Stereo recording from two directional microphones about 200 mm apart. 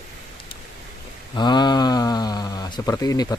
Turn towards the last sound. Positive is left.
turn(degrees=20)  # may be behind; listen again after turning